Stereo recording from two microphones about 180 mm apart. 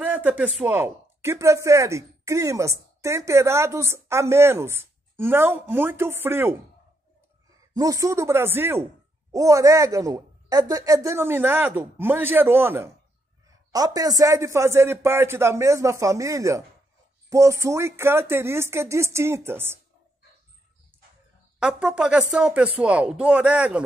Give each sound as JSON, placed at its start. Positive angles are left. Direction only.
{"t": 0.0, "sound": "speech", "side_deg": -10}
{"t": 7.7, "sound": "speech", "side_deg": -20}
{"t": 21.5, "sound": "speech", "side_deg": -5}